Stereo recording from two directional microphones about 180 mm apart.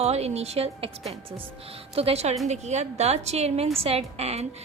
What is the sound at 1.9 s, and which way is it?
Speech, 35° right (ahead or behind).